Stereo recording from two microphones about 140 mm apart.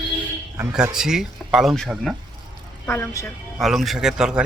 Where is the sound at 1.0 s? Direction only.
5° right (ahead or behind).